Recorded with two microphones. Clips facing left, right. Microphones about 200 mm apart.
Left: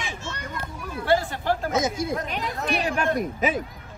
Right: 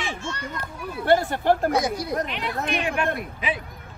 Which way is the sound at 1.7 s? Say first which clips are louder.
Even; 20° left (ahead or behind).